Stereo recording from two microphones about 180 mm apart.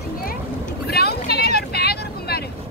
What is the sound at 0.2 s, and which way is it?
Boat, 55° left (ahead or behind).